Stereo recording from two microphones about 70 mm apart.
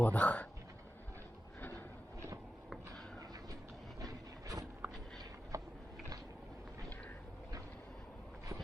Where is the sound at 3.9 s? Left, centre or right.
Right.